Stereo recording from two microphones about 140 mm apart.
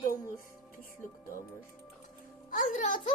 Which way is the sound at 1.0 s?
75° left (ahead or behind).